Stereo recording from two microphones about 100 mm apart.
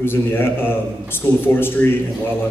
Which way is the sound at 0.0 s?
25° left (ahead or behind).